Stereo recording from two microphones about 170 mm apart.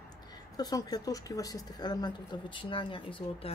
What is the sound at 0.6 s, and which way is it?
A woman's voice, 20° left (ahead or behind).